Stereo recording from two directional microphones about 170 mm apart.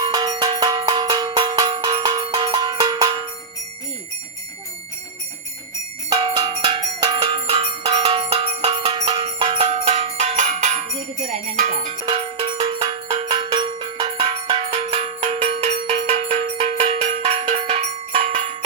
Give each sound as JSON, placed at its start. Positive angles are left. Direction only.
{"t": 0.0, "sound": "cowbell", "side_deg": -25}
{"t": 6.1, "sound": "bell", "side_deg": -25}
{"t": 11.5, "sound": "music", "side_deg": -50}
{"t": 12.0, "sound": "cowbell", "side_deg": -30}